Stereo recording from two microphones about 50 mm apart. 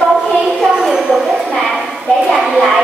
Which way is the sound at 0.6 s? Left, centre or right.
Centre.